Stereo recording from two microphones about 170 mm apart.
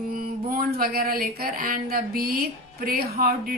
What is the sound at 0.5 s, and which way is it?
A woman's voice, 60° right (ahead or behind).